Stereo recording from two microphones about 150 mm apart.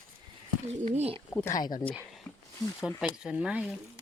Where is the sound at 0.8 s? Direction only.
45° right (ahead or behind).